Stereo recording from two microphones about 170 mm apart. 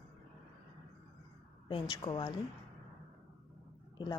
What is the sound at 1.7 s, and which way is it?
Speech, 25° left (ahead or behind).